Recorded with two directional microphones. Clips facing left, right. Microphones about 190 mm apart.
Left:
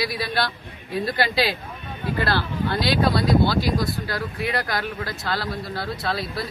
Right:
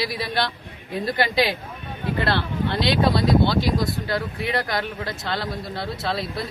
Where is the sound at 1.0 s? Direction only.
20° right (ahead or behind).